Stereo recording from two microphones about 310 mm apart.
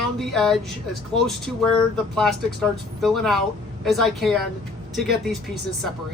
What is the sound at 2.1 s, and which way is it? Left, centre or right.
Speech, centre.